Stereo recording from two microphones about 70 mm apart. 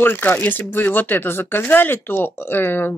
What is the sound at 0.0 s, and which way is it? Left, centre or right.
Speech, left.